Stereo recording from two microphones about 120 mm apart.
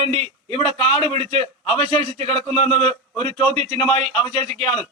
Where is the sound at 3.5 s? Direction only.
65° right (ahead or behind).